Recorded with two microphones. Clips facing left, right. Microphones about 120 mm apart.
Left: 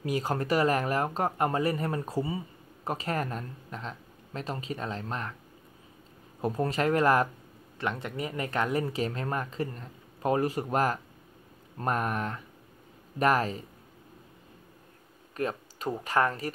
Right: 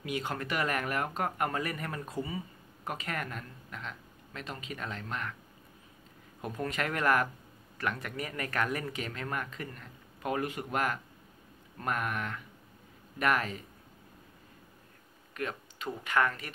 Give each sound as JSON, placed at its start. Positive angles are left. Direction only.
{"t": 0.0, "sound": "speech", "side_deg": 35}
{"t": 6.4, "sound": "speech", "side_deg": 35}
{"t": 15.3, "sound": "speech", "side_deg": 35}